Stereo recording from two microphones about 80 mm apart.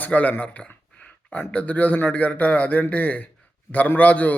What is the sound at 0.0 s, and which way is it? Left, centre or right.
A man's voice, centre.